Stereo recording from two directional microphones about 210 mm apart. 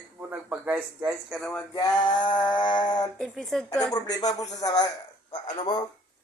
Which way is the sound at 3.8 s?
20° left (ahead or behind).